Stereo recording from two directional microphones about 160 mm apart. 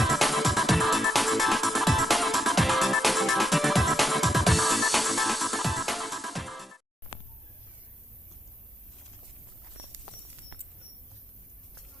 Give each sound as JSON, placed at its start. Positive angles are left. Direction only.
{"t": 0.0, "sound": "music", "side_deg": 0}